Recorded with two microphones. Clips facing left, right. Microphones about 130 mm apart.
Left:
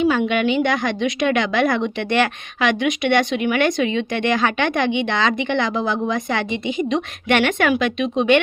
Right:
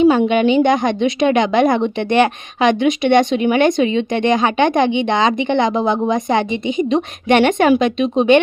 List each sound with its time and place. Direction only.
0.0 s a woman's voice: 25° right (ahead or behind)